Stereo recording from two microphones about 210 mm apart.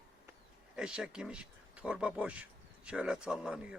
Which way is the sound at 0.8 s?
5° right (ahead or behind).